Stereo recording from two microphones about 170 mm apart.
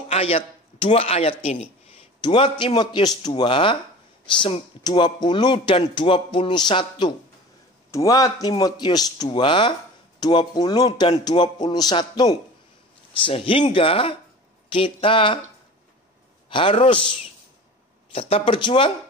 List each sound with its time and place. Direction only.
0.1 s speech: 35° left (ahead or behind)
2.2 s speech: 30° left (ahead or behind)
16.4 s a man's voice: 30° left (ahead or behind)
18.3 s speech: 30° left (ahead or behind)